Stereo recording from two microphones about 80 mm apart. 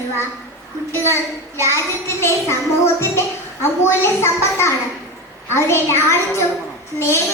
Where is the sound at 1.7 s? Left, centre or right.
Left.